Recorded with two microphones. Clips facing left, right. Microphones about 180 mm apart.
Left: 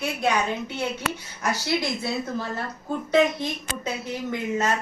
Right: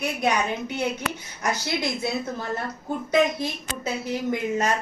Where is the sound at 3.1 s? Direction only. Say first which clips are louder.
Left 1 dB; 10° right (ahead or behind).